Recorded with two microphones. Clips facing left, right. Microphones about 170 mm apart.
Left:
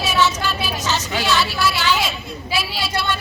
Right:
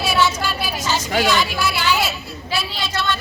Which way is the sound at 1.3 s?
10° right (ahead or behind).